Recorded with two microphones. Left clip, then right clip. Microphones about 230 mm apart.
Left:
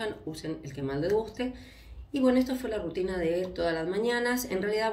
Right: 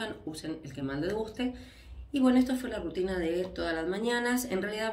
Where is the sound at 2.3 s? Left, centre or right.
Right.